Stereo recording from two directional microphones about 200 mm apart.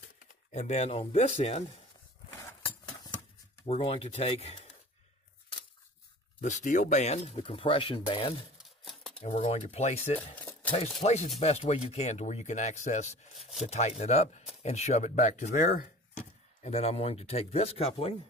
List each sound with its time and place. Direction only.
0.5 s speech: 35° left (ahead or behind)
3.6 s speech: 30° left (ahead or behind)
6.4 s speech: 40° left (ahead or behind)
8.8 s a sound: centre (ahead or behind)
9.2 s speech: 30° left (ahead or behind)
10.3 s a sound: 10° left (ahead or behind)
11.1 s speech: 35° left (ahead or behind)
13.3 s speech: centre (ahead or behind)
13.7 s speech: 35° left (ahead or behind)
16.6 s speech: 30° left (ahead or behind)